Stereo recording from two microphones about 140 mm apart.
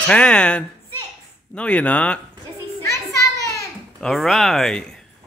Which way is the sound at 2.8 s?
20° left (ahead or behind).